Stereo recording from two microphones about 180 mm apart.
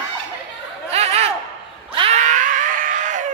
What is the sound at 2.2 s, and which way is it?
Screaming, 45° right (ahead or behind).